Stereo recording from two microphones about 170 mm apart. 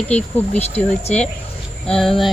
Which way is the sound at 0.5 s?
40° left (ahead or behind).